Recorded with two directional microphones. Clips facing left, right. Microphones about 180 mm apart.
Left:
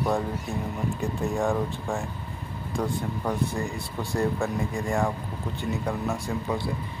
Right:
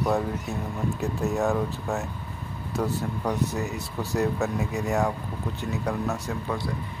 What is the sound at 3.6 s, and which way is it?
Speech, 5° right (ahead or behind).